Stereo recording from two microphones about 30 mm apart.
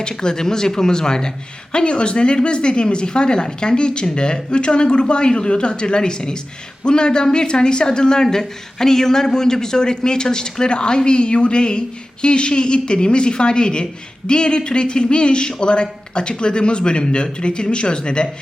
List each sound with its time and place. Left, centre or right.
0.2 s a woman's voice: left
1.7 s a woman's voice: left